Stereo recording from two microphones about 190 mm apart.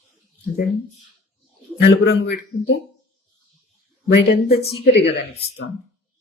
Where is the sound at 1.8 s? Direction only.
60° left (ahead or behind).